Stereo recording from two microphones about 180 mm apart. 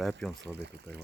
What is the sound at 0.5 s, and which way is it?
Speech, 65° right (ahead or behind).